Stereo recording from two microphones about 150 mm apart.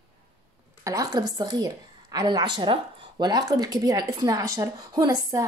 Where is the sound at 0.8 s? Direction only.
25° right (ahead or behind).